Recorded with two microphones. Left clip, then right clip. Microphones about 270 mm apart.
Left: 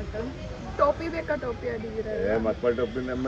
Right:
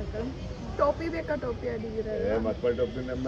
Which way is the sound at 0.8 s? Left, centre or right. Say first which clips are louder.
Left 3 dB; centre.